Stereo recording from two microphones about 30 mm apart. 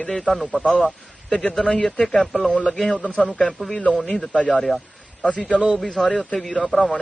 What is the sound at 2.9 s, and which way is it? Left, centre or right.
Speech, left.